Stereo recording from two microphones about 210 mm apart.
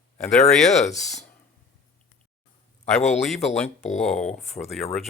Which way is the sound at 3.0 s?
30° left (ahead or behind).